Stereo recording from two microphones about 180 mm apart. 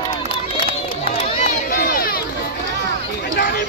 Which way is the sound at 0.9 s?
40° left (ahead or behind).